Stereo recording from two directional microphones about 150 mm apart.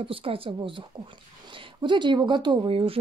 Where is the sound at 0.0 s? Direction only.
35° right (ahead or behind).